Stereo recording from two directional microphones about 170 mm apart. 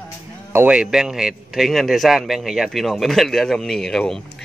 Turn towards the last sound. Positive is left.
turn(degrees=5)  # may be behind; listen again after turning